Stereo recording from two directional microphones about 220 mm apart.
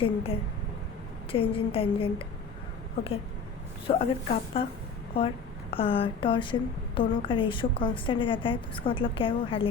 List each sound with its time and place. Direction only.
0.0 s a woman's voice: 25° left (ahead or behind)
3.8 s a woman's voice: 30° left (ahead or behind)
5.7 s a woman's voice: 25° left (ahead or behind)